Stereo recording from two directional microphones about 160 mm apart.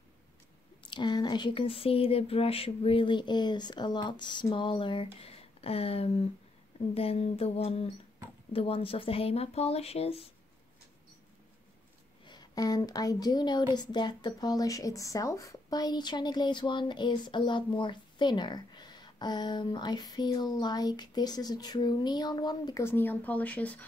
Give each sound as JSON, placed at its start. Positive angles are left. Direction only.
{"t": 0.8, "sound": "speech", "side_deg": 30}
{"t": 12.3, "sound": "a woman's voice", "side_deg": 25}
{"t": 22.8, "sound": "speech", "side_deg": 15}